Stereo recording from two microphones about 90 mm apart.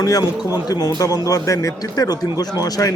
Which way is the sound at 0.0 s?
45° left (ahead or behind).